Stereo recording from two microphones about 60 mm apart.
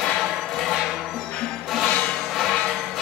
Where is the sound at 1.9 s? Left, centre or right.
Centre.